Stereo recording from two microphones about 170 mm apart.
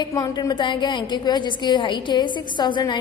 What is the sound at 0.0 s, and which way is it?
A woman's voice, 25° left (ahead or behind).